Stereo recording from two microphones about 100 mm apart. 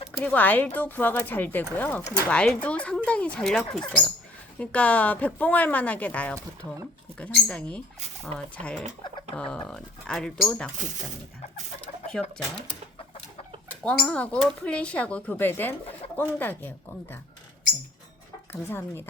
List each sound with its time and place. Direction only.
0.2 s speech: 15° left (ahead or behind)
12.2 s speech: 10° left (ahead or behind)
13.7 s speech: 10° left (ahead or behind)
18.5 s speech: 20° left (ahead or behind)